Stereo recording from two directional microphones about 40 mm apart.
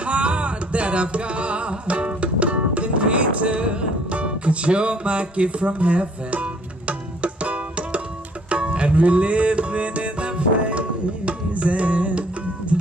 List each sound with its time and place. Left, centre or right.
0.0 s music: right